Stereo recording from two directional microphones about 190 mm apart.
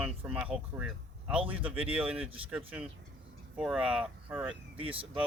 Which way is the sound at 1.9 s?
5° right (ahead or behind).